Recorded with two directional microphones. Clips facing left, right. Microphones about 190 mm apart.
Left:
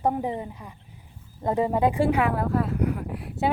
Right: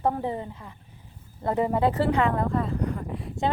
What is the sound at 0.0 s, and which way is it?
A woman's voice, 15° left (ahead or behind).